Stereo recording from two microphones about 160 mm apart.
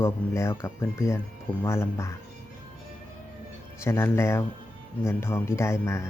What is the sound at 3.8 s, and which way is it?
Speech, 15° left (ahead or behind).